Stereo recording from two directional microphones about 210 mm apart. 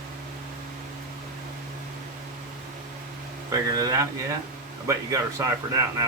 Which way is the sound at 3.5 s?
15° right (ahead or behind).